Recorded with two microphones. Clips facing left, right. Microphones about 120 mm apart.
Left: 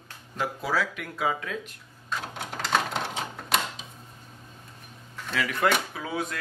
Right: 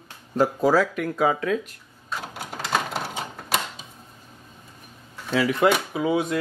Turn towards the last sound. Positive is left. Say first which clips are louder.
# right 9 dB
turn(degrees=-25)  # may be behind; listen again after turning